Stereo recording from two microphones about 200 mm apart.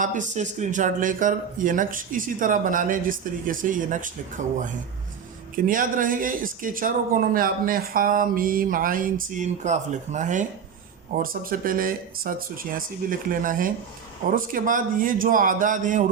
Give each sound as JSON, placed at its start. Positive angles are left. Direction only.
{"t": 0.0, "sound": "speech", "side_deg": -40}
{"t": 5.6, "sound": "speech", "side_deg": -45}